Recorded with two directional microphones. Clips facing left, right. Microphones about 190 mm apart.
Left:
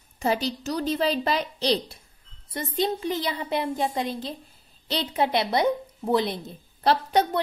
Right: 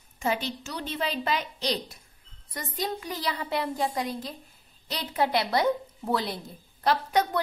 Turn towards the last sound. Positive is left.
turn(degrees=30)  # may be behind; listen again after turning